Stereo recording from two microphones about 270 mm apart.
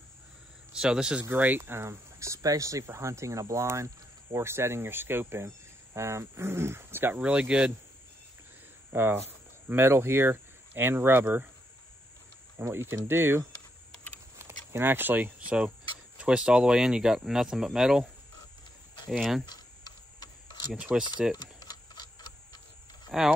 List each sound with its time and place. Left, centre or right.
0.7 s speech: centre
8.9 s speech: centre
12.5 s speech: centre
19.0 s speech: centre
19.4 s a sound: centre
20.7 s speech: centre
21.4 s tick-tock: centre
23.1 s speech: centre